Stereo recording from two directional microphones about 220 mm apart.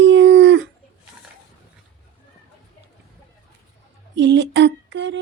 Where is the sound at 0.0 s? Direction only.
55° right (ahead or behind).